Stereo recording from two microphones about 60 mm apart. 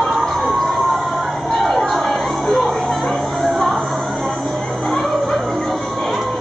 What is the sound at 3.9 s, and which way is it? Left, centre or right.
Music, centre.